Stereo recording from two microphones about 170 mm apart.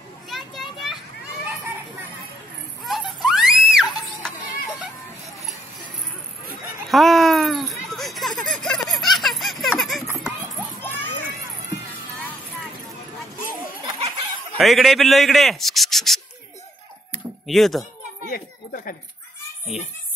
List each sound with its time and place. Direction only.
0.3 s children playing: centre (ahead or behind)
2.8 s screaming: centre (ahead or behind)
6.9 s a sound: centre (ahead or behind)
10.8 s children playing: 10° left (ahead or behind)
14.6 s speech: centre (ahead or behind)
17.5 s speech: centre (ahead or behind)
18.3 s a sound: 60° left (ahead or behind)